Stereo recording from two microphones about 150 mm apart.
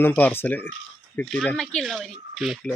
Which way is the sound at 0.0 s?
15° left (ahead or behind).